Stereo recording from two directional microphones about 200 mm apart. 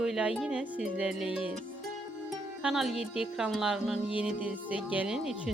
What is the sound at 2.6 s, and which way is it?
Speech, centre (ahead or behind).